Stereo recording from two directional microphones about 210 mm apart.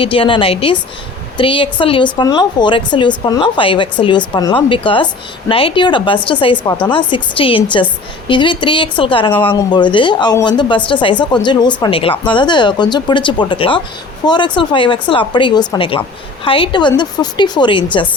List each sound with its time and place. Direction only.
0.0 s a woman's voice: 25° left (ahead or behind)